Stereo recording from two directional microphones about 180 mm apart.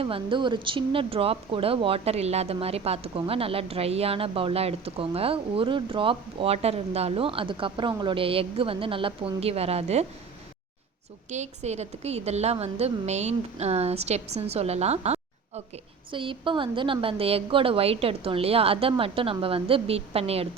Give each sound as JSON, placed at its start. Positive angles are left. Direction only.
{"t": 0.0, "sound": "speech", "side_deg": -30}
{"t": 11.3, "sound": "speech", "side_deg": -40}